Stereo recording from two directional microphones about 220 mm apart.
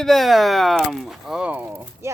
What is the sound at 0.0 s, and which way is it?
Speech, centre (ahead or behind).